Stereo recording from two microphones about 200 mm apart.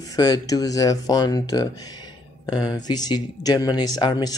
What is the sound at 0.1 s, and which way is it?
Speech, 20° left (ahead or behind).